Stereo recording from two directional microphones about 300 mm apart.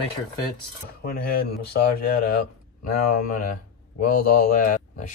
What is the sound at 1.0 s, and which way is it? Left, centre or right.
Speech, left.